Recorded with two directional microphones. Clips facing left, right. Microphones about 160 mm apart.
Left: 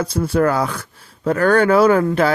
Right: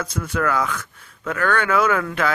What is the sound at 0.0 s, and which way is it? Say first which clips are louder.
Speech: left 7 dB; 30° left (ahead or behind).